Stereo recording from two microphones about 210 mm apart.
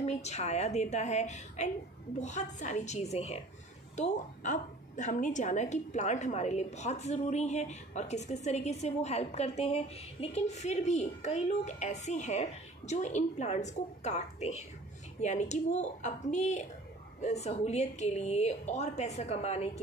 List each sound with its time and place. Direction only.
0.0 s a woman's voice: 30° left (ahead or behind)